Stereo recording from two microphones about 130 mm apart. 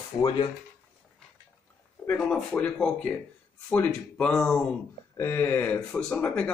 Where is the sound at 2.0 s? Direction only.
10° left (ahead or behind).